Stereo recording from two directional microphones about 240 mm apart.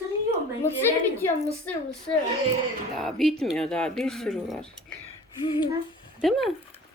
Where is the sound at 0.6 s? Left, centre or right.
Centre.